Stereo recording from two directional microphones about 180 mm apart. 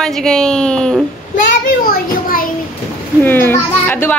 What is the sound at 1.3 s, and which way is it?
A child's voice, 50° left (ahead or behind).